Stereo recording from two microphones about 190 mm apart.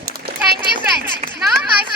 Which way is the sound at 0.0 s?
55° right (ahead or behind).